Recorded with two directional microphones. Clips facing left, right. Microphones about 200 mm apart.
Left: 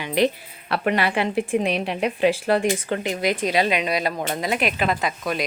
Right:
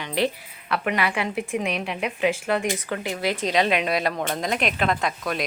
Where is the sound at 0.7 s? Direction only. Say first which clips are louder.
Left 3 dB; 30° left (ahead or behind); by 5.5 s centre (ahead or behind).